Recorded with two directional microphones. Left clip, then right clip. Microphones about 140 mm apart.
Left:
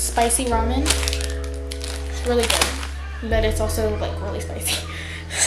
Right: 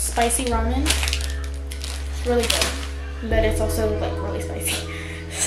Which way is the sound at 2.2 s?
15° left (ahead or behind).